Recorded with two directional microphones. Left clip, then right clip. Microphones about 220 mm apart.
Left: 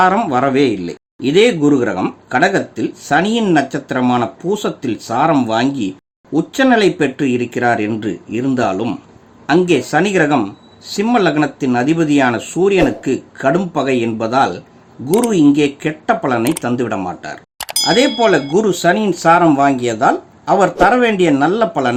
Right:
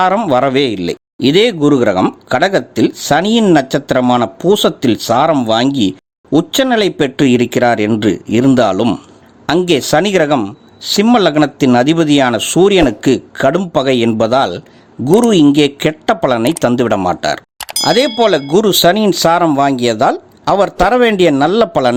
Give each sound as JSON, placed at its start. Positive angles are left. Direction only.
{"t": 0.0, "sound": "speech", "side_deg": -40}
{"t": 17.6, "sound": "chink", "side_deg": 0}
{"t": 17.8, "sound": "speech", "side_deg": -40}